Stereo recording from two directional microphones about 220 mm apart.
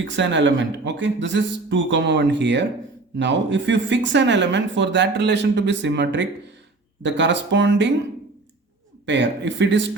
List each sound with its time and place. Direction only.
0.0 s speech: 55° right (ahead or behind)
9.0 s speech: 55° right (ahead or behind)